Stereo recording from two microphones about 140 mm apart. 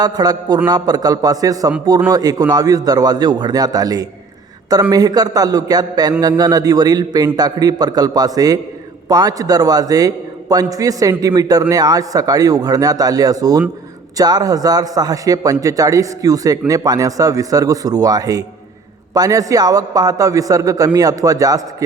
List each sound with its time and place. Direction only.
0.0 s a man's voice: 30° right (ahead or behind)